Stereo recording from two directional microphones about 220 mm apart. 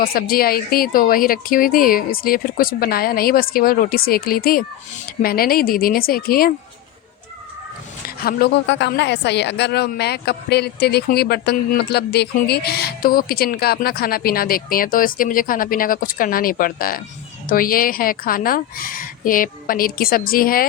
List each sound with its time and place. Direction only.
0.0 s a woman's voice: 40° left (ahead or behind)
8.0 s a woman's voice: 40° left (ahead or behind)